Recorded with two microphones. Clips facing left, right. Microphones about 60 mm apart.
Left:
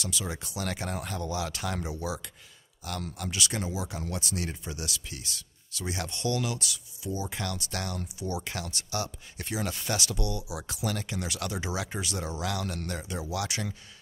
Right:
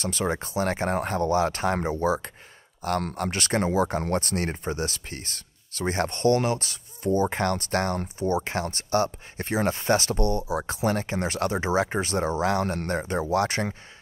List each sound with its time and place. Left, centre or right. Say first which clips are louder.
0.0 s speech: right 8 dB; right